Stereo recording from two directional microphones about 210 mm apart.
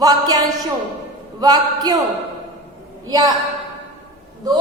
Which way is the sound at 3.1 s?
15° right (ahead or behind).